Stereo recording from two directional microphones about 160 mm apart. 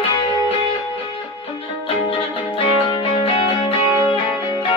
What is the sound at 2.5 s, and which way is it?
Music, 35° left (ahead or behind).